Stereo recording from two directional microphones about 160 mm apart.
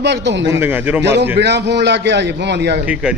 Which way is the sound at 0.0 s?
90° right.